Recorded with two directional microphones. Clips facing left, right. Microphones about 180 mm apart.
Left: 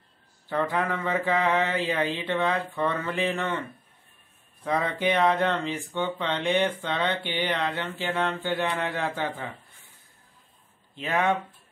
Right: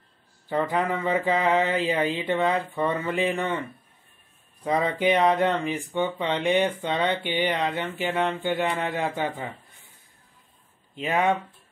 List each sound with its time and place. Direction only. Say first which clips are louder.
0.5 s speech: right 2 dB; 20° right (ahead or behind)
4.6 s speech: right 3 dB; 15° right (ahead or behind)
11.0 s speech: right 2 dB; 15° right (ahead or behind)